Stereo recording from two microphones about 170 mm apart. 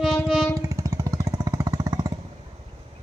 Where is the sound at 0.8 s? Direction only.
20° right (ahead or behind).